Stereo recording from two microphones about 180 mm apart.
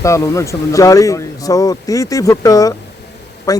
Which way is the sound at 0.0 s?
15° left (ahead or behind).